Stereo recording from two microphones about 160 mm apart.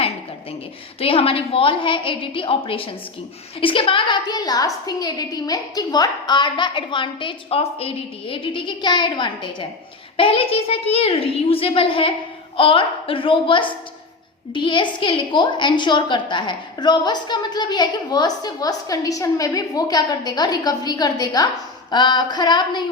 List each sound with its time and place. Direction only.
0.9 s a child's voice: 35° left (ahead or behind)